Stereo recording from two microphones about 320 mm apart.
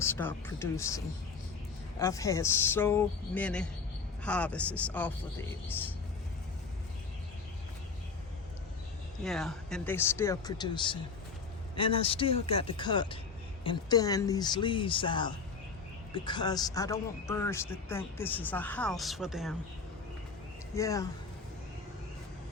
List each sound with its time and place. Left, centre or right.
0.0 s a man's voice: centre
9.2 s a man's voice: centre
20.7 s a man's voice: centre